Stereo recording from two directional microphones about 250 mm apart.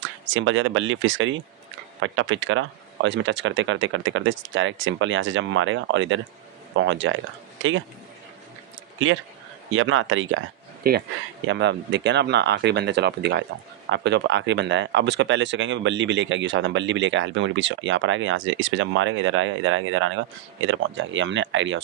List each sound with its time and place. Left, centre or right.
0.3 s speech: right
9.7 s speech: right
10.8 s speech: right